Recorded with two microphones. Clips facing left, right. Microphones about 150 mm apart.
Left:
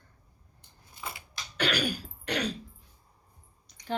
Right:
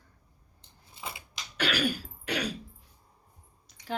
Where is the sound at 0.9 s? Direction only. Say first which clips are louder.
Even; 25° right (ahead or behind).